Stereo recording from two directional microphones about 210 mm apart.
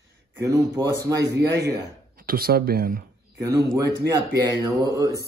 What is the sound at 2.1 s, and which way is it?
Speech, 45° right (ahead or behind).